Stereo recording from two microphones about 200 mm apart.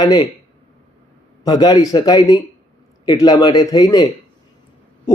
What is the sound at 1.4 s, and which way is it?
Speech, 20° left (ahead or behind).